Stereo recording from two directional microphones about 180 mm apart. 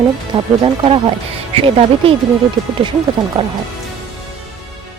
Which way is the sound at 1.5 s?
30° right (ahead or behind).